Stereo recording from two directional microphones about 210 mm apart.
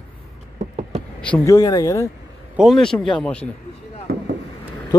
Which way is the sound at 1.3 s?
15° left (ahead or behind).